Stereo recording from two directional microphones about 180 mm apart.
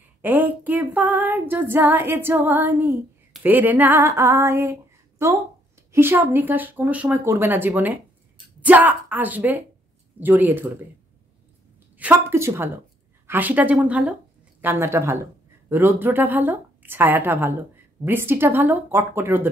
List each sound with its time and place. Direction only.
0.2 s female singing: 10° right (ahead or behind)
3.4 s a woman's voice: 10° right (ahead or behind)
12.0 s a woman's voice: 10° right (ahead or behind)